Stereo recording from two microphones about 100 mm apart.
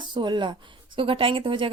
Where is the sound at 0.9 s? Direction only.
60° right (ahead or behind).